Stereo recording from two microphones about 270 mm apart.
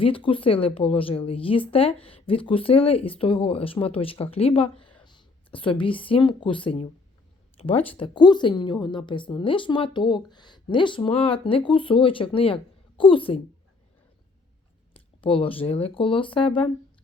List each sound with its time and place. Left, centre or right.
0.0 s a woman's voice: centre
14.9 s a woman's voice: centre